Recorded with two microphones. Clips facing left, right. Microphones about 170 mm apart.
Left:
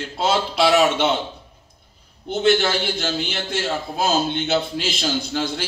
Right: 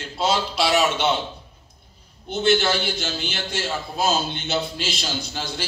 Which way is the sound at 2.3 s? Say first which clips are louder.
Left 2 dB; 55° left (ahead or behind).